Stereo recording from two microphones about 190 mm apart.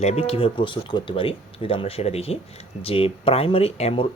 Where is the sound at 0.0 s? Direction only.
35° left (ahead or behind).